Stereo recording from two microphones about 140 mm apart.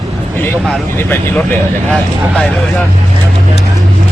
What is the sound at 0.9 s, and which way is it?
Speech, 15° left (ahead or behind).